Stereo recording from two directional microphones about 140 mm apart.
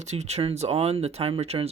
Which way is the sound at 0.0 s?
55° right (ahead or behind).